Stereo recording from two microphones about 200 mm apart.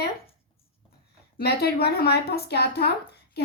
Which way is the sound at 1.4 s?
50° left (ahead or behind).